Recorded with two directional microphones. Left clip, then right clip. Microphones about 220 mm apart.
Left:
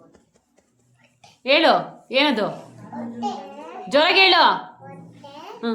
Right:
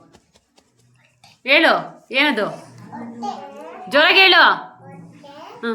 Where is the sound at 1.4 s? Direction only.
15° left (ahead or behind).